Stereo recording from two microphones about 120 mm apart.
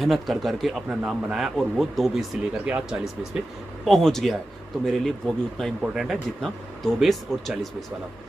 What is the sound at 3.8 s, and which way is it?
Speech, centre (ahead or behind).